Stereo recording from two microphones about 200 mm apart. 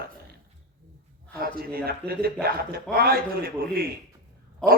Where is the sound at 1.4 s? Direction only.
50° right (ahead or behind).